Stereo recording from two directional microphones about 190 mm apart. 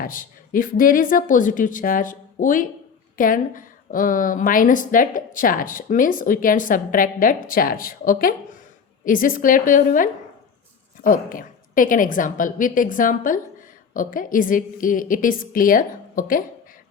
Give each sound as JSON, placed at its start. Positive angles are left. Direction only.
{"t": 0.0, "sound": "a woman's voice", "side_deg": 45}